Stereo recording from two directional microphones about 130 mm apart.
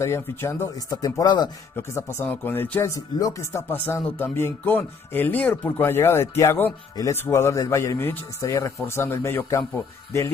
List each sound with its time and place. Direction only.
0.0 s speech: 20° left (ahead or behind)
1.8 s speech: 20° left (ahead or behind)